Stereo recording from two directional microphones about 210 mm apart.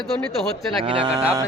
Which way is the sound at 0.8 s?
25° right (ahead or behind).